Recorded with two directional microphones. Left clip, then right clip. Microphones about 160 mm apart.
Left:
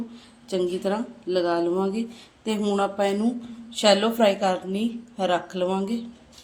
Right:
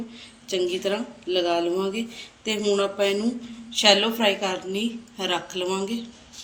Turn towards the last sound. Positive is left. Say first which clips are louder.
# left 1 dB
turn(degrees=60)  # may be behind; listen again after turning